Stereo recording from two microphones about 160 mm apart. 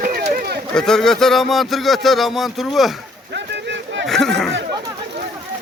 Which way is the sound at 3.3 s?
90° right.